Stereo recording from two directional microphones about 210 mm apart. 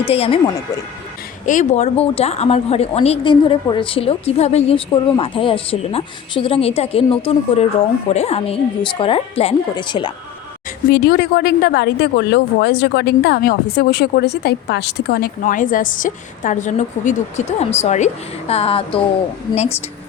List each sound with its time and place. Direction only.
0.0 s a woman's voice: 25° left (ahead or behind)
1.5 s a woman's voice: 35° left (ahead or behind)
10.8 s a woman's voice: 45° left (ahead or behind); by 19.0 s 25° left (ahead or behind)